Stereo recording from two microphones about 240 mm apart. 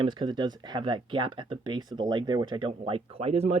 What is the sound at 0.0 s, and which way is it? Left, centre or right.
Speech, centre.